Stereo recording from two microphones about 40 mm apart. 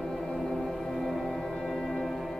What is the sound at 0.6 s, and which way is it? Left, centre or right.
Music, centre.